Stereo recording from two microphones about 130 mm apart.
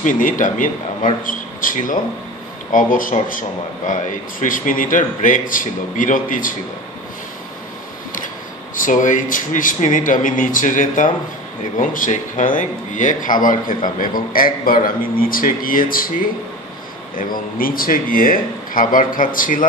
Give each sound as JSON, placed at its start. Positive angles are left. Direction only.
{"t": 0.0, "sound": "a man's voice", "side_deg": 85}
{"t": 8.7, "sound": "a man's voice", "side_deg": 85}
{"t": 17.6, "sound": "a man's voice", "side_deg": 90}